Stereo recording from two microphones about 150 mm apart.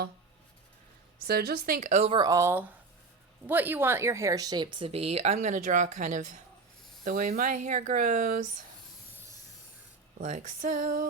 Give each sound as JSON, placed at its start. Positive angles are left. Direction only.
{"t": 1.3, "sound": "speech", "side_deg": -90}
{"t": 1.9, "sound": "speech", "side_deg": -45}
{"t": 2.1, "sound": "speech", "side_deg": -25}
{"t": 10.2, "sound": "speech", "side_deg": -50}